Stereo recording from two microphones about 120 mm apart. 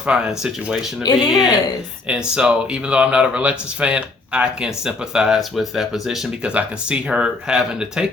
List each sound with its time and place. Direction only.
0.0 s speech: 5° right (ahead or behind)
1.0 s speech: 35° left (ahead or behind)
2.0 s speech: 5° right (ahead or behind)